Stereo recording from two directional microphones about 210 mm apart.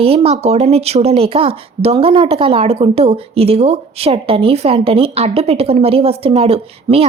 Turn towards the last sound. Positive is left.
turn(degrees=-30)  # may be behind; listen again after turning